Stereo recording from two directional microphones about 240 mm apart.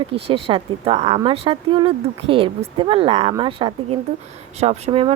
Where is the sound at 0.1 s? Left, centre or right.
Right.